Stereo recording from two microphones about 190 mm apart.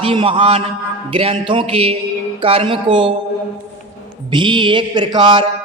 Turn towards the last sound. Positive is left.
turn(degrees=-25)  # may be behind; listen again after turning